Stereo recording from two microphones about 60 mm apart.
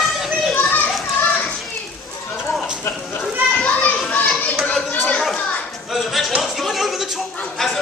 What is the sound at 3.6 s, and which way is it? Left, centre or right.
Children playing, left.